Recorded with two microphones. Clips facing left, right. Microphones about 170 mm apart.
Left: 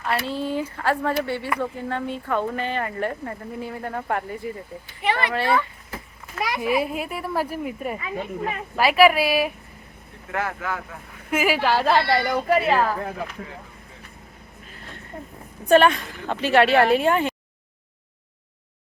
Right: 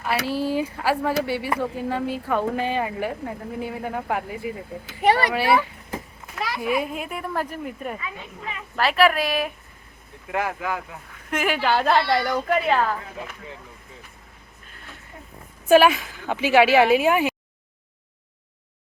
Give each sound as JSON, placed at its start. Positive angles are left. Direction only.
{"t": 0.3, "sound": "speech", "side_deg": 20}
{"t": 0.5, "sound": "speech", "side_deg": -10}
{"t": 5.0, "sound": "a child's voice", "side_deg": -40}
{"t": 5.3, "sound": "speech", "side_deg": -10}
{"t": 6.6, "sound": "speech", "side_deg": 5}
{"t": 8.0, "sound": "speech", "side_deg": 45}
{"t": 8.7, "sound": "speech", "side_deg": 10}
{"t": 10.3, "sound": "speech", "side_deg": -15}
{"t": 11.3, "sound": "speech", "side_deg": 5}
{"t": 15.6, "sound": "speech", "side_deg": -5}